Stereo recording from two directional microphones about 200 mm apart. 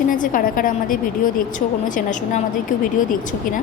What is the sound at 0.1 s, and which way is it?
A woman's voice, 45° left (ahead or behind).